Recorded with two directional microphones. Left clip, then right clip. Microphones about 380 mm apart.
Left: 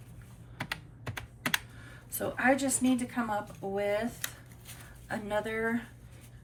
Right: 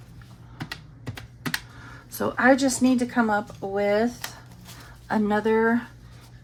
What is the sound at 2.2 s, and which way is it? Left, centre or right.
Speech, centre.